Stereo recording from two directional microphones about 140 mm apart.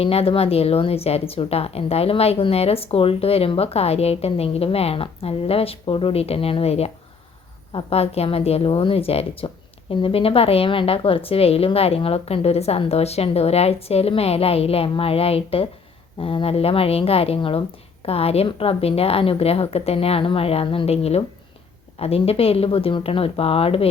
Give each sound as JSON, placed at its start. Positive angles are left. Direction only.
{"t": 0.0, "sound": "speech", "side_deg": 45}